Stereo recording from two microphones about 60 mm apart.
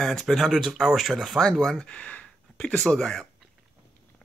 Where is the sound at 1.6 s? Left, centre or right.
Centre.